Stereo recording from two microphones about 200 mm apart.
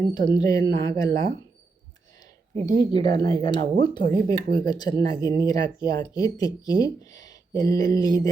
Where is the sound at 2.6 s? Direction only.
20° left (ahead or behind).